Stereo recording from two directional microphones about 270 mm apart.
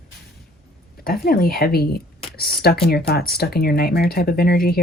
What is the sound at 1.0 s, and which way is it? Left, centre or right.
Speech, left.